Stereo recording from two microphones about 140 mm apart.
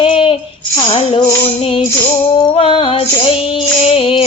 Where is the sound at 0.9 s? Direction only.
40° left (ahead or behind).